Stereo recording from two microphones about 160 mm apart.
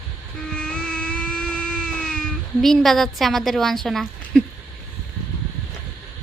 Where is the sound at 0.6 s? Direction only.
5° left (ahead or behind).